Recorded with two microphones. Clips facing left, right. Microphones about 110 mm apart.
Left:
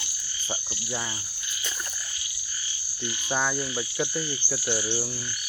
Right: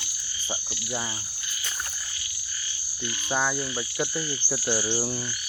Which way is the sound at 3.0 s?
5° right (ahead or behind).